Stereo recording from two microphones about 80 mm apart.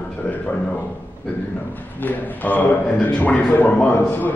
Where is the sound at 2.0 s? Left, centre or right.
Left.